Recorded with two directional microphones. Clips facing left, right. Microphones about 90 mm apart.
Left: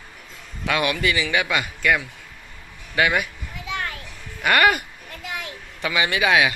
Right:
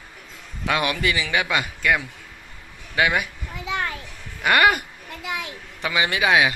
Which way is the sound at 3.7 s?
25° right (ahead or behind).